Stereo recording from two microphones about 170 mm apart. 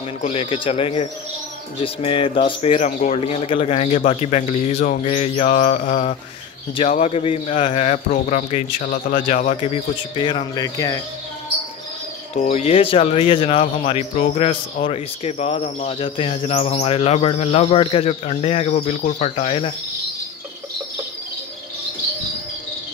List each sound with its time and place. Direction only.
0.2 s speech: 35° left (ahead or behind)
8.9 s speech: 50° left (ahead or behind); by 11.0 s 20° left (ahead or behind)
12.4 s speech: 45° left (ahead or behind)